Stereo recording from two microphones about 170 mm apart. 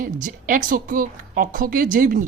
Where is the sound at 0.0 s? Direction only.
50° right (ahead or behind).